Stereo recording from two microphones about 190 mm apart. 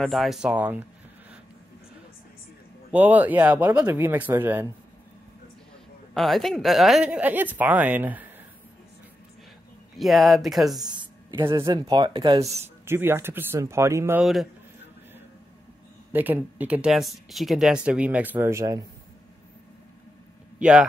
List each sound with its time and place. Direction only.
0.0 s speech: centre (ahead or behind)
2.9 s speech: 10° right (ahead or behind)
6.1 s speech: centre (ahead or behind)
9.9 s speech: centre (ahead or behind)
10.8 s a sound: 20° right (ahead or behind)
11.5 s speech: 20° right (ahead or behind)
12.8 s speech: 10° right (ahead or behind)
14.2 s speech: centre (ahead or behind)
16.1 s speech: 10° right (ahead or behind)
20.5 s speech: 5° right (ahead or behind)